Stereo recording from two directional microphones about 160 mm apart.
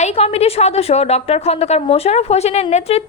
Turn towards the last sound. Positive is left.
turn(degrees=40)  # may be behind; listen again after turning